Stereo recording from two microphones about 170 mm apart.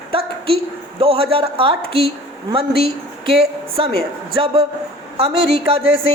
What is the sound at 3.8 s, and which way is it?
Speech, 30° right (ahead or behind).